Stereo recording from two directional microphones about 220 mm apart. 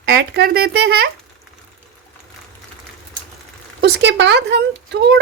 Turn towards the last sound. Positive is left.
turn(degrees=-50)  # may be behind; listen again after turning